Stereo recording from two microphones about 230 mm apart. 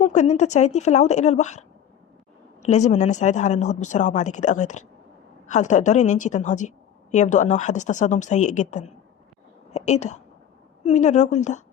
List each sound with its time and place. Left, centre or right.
0.0 s a woman's voice: left